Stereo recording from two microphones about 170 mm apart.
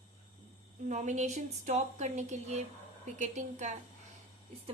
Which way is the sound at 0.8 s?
45° right (ahead or behind).